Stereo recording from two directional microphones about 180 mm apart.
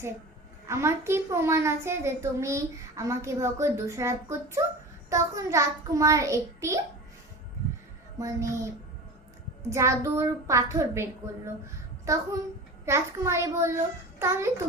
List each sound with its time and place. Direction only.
0.7 s a child's voice: 15° right (ahead or behind)
8.2 s a child's voice: 15° right (ahead or behind)